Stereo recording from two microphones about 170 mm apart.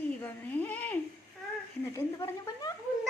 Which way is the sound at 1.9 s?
15° left (ahead or behind).